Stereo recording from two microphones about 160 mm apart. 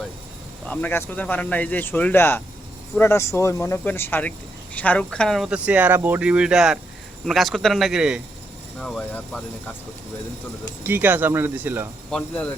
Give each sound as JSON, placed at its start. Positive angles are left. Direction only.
{"t": 0.7, "sound": "speech", "side_deg": 10}
{"t": 10.8, "sound": "speech", "side_deg": -10}
{"t": 12.1, "sound": "speech", "side_deg": 5}